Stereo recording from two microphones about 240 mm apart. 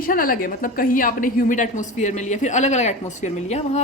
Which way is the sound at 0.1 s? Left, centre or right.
Left.